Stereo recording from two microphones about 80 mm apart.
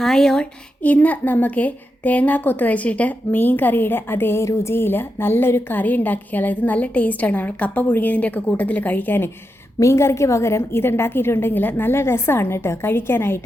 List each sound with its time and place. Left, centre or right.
0.0 s speech: centre
0.8 s a woman's voice: centre
9.8 s a woman's voice: left